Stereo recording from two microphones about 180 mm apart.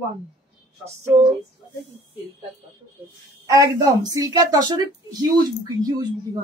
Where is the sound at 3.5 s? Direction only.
20° right (ahead or behind).